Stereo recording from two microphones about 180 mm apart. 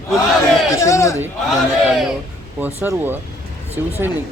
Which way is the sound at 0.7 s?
15° left (ahead or behind).